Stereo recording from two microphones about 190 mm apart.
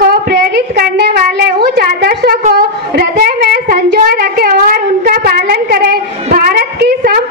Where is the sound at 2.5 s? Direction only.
55° right (ahead or behind).